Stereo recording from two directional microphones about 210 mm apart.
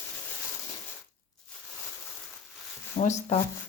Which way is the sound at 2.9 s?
35° left (ahead or behind).